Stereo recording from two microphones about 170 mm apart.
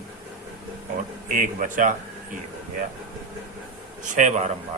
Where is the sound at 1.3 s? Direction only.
50° right (ahead or behind).